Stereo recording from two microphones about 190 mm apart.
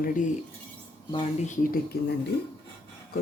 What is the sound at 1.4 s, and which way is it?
Speech, 40° left (ahead or behind).